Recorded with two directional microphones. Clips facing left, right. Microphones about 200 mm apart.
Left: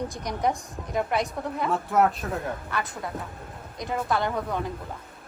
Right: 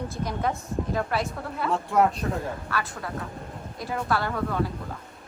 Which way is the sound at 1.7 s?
Centre (ahead or behind).